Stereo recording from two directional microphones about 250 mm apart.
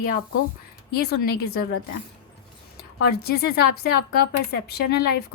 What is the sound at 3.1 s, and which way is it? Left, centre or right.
A woman's voice, left.